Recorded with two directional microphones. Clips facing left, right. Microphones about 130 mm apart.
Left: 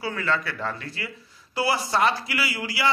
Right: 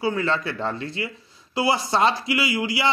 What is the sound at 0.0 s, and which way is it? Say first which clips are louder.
Speech: right 4 dB; 20° right (ahead or behind).